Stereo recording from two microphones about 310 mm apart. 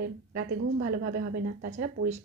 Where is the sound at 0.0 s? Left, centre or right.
Right.